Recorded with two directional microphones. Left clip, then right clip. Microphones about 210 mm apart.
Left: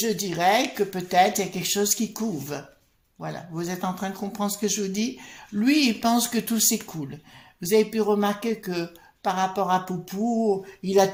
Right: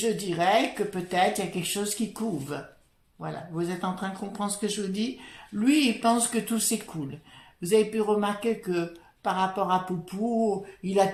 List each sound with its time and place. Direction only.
0.0 s a woman's voice: 35° left (ahead or behind)